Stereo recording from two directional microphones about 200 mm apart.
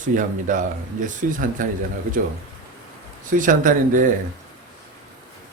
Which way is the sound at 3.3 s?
40° right (ahead or behind).